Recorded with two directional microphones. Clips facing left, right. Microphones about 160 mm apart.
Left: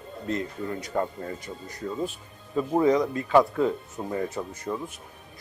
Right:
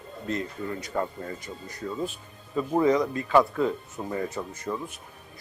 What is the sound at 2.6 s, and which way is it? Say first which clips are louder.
A man's voice: left 1 dB; 20° left (ahead or behind).